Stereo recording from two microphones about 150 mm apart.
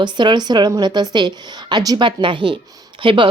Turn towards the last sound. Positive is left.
turn(degrees=-35)  # may be behind; listen again after turning